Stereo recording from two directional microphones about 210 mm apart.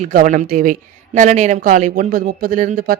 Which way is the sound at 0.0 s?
40° right (ahead or behind).